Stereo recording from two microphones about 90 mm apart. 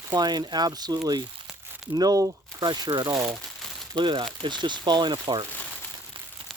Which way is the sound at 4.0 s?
60° right (ahead or behind).